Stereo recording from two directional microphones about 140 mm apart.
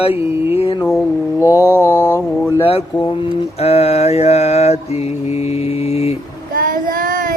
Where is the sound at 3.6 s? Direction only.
45° left (ahead or behind).